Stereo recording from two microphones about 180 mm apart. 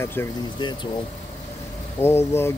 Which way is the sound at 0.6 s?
25° left (ahead or behind).